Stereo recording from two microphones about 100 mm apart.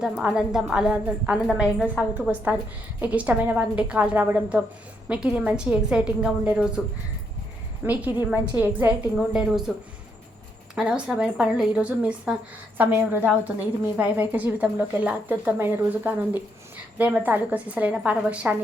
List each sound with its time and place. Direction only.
0.0 s a woman's voice: 10° right (ahead or behind)
7.9 s a woman's voice: 15° right (ahead or behind)
9.1 s a woman's voice: 5° right (ahead or behind)
10.8 s a woman's voice: 10° right (ahead or behind)